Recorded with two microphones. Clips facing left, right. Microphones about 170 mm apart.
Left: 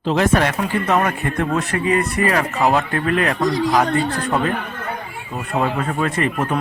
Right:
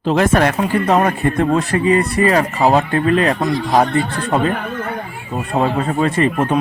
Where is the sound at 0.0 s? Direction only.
50° right (ahead or behind).